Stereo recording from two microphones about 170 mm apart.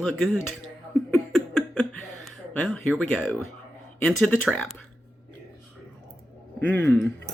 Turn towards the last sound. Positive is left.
turn(degrees=10)  # may be behind; listen again after turning